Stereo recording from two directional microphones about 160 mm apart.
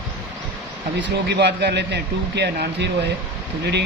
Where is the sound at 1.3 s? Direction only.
90° right.